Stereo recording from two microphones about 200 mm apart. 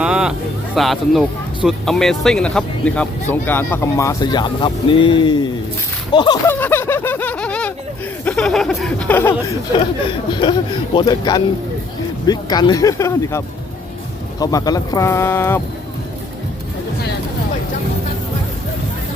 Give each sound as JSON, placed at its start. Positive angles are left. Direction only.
{"t": 0.0, "sound": "speech", "side_deg": -5}
{"t": 6.5, "sound": "speech", "side_deg": 10}
{"t": 10.2, "sound": "speech", "side_deg": 25}